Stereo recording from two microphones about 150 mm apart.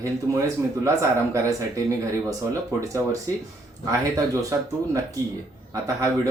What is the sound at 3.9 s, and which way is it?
Speech, 20° right (ahead or behind).